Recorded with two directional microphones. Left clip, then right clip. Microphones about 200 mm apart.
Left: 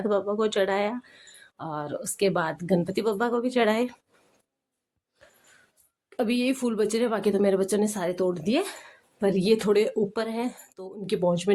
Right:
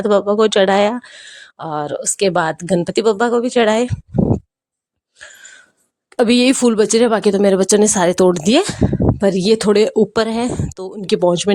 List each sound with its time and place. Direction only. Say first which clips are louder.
0.0 s speech: right 12 dB; 50° right (ahead or behind)
5.2 s a sound: right 18 dB; 35° right (ahead or behind)
6.1 s speech: right 13 dB; 60° right (ahead or behind)